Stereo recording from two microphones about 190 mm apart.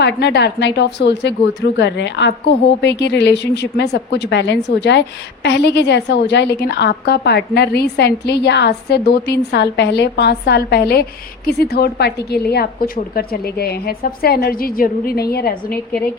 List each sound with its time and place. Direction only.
0.0 s a woman's voice: 65° left (ahead or behind)